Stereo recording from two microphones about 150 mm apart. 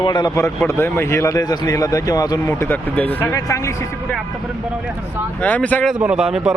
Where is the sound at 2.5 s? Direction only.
10° left (ahead or behind).